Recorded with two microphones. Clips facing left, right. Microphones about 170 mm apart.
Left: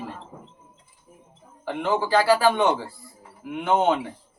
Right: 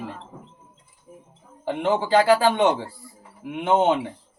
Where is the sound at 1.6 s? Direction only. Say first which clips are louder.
Right 2 dB; 20° right (ahead or behind).